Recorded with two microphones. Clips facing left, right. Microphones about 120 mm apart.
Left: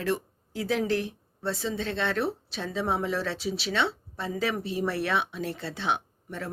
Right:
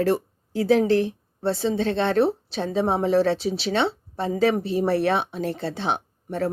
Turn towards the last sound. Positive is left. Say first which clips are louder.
# right 11 dB
turn(degrees=-30)  # may be behind; listen again after turning